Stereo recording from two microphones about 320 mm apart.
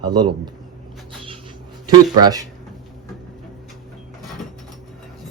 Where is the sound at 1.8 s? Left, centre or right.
Centre.